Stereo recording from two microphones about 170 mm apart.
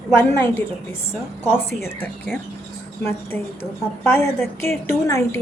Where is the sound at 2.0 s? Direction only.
5° left (ahead or behind).